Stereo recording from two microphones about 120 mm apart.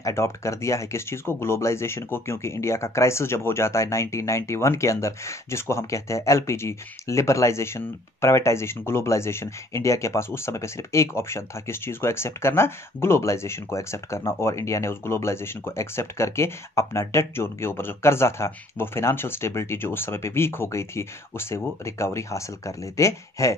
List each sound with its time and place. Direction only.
0.0 s speech: 25° left (ahead or behind)